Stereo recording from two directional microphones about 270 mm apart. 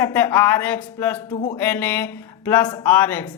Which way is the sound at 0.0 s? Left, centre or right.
Centre.